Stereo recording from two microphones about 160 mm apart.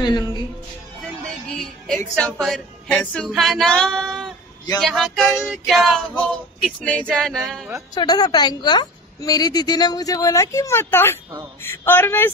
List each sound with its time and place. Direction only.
0.0 s music: 25° left (ahead or behind)
1.2 s music: 5° left (ahead or behind)
2.1 s female singing: 5° left (ahead or behind)
7.9 s a woman's voice: 25° left (ahead or behind)